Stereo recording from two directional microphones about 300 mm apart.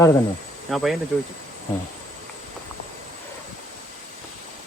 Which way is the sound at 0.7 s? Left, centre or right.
Centre.